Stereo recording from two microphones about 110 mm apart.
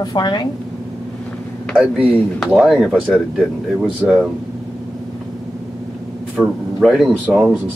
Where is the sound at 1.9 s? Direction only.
10° left (ahead or behind).